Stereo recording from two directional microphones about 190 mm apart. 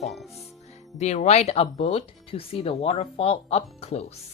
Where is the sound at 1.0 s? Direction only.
35° left (ahead or behind).